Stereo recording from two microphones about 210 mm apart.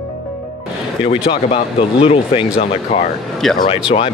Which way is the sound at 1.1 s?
25° left (ahead or behind).